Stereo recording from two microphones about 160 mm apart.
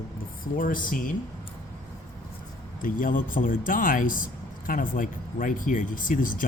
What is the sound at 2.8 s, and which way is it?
Speech, 55° left (ahead or behind).